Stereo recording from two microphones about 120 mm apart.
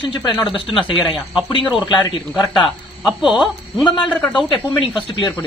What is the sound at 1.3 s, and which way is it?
A man's voice, 45° left (ahead or behind).